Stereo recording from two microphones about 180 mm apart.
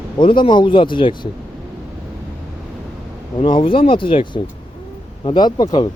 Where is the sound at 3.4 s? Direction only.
30° left (ahead or behind).